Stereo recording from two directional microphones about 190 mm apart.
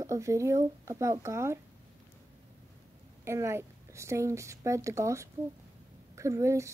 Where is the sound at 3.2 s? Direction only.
15° right (ahead or behind).